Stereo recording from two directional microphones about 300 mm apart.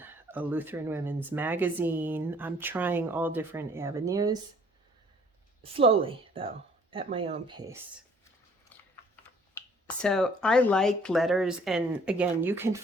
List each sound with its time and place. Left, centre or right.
0.0 s speech: centre
5.6 s a woman's voice: centre
9.6 s speech: centre